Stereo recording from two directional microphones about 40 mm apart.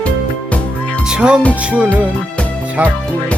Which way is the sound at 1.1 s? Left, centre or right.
Right.